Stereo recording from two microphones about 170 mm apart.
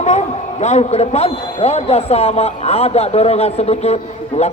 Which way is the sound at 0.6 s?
40° left (ahead or behind).